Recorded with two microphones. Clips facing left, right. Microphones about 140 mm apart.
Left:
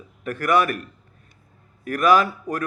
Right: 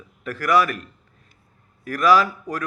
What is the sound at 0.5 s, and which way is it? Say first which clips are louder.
Speech: right 1 dB; 50° left (ahead or behind).